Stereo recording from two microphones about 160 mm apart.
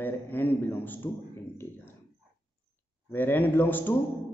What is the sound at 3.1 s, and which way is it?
Speech, 10° left (ahead or behind).